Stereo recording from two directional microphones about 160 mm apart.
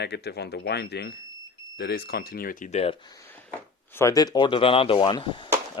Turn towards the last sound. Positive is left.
turn(degrees=30)  # may be behind; listen again after turning